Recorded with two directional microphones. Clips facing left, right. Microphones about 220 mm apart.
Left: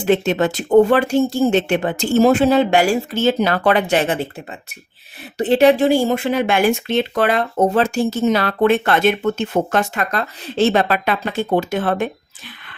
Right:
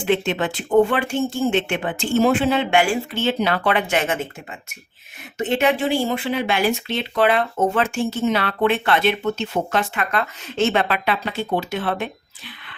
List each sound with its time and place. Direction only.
0.0 s speech: 40° left (ahead or behind)
5.4 s speech: 35° left (ahead or behind)